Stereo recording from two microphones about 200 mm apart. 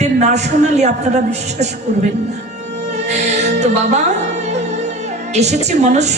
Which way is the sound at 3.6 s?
35° right (ahead or behind).